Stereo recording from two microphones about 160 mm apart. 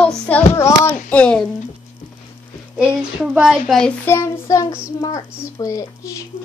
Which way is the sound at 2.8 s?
5° right (ahead or behind).